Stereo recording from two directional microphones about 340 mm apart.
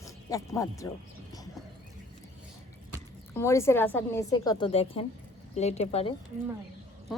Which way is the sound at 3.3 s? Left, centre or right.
Centre.